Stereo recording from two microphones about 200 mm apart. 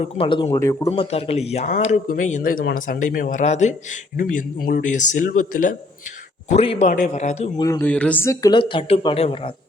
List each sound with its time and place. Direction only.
0.0 s speech: 25° left (ahead or behind)
0.9 s speech: 30° left (ahead or behind)
7.6 s speech: 15° left (ahead or behind)